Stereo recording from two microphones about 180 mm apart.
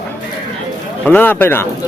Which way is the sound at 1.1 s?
10° left (ahead or behind).